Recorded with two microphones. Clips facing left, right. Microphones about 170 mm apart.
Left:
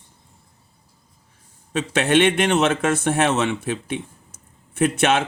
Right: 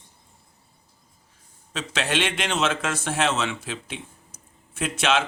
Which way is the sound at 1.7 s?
55° left (ahead or behind).